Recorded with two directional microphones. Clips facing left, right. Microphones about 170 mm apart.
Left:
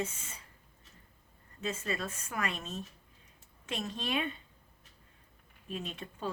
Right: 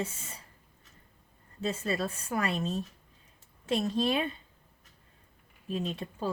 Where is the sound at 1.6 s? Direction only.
35° right (ahead or behind).